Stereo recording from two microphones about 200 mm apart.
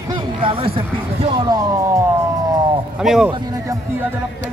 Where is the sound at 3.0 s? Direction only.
Centre (ahead or behind).